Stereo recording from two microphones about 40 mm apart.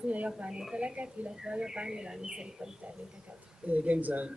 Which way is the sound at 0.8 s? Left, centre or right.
Right.